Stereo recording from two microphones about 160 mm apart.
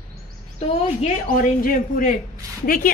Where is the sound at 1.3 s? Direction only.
60° left (ahead or behind).